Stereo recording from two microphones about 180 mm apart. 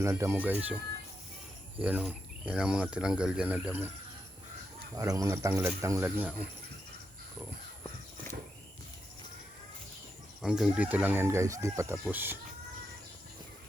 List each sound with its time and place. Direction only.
0.0 s speech: 15° right (ahead or behind)
1.8 s speech: 10° right (ahead or behind)
4.9 s speech: 20° right (ahead or behind)
10.4 s speech: 5° right (ahead or behind)